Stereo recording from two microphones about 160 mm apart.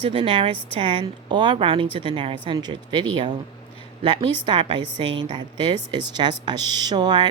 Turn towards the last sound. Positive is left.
turn(degrees=-25)  # may be behind; listen again after turning